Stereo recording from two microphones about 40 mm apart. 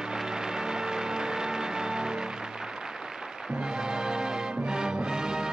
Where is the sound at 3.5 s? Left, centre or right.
Centre.